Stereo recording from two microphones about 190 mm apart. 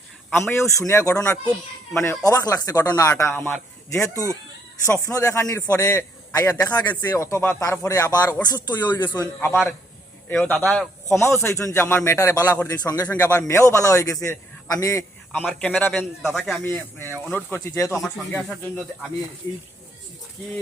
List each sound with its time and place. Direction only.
0.4 s a man's voice: 15° left (ahead or behind)
18.0 s speech: centre (ahead or behind)